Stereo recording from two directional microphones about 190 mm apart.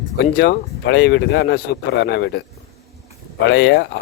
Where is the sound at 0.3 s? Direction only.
65° left (ahead or behind).